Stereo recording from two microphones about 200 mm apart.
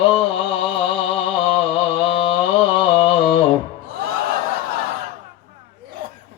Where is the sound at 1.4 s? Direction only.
30° left (ahead or behind).